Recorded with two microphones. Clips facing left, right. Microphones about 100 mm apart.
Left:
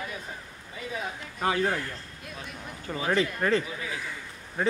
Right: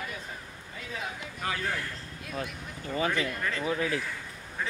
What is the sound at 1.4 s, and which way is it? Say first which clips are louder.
Speech: left 7 dB; 30° left (ahead or behind).